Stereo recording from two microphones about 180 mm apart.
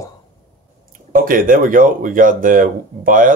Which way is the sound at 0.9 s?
50° right (ahead or behind).